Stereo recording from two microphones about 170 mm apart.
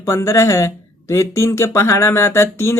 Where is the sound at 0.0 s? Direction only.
20° left (ahead or behind).